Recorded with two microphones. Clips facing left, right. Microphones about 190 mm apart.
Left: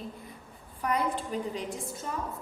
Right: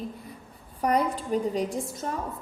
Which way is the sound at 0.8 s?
40° right (ahead or behind).